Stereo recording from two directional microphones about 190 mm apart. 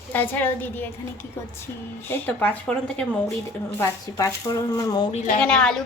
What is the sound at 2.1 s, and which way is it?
Child singing, 10° left (ahead or behind).